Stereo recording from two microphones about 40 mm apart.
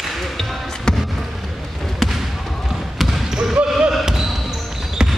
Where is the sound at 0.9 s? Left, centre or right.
Centre.